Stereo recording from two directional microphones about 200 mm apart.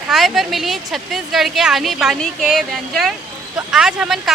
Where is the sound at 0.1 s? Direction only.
Centre (ahead or behind).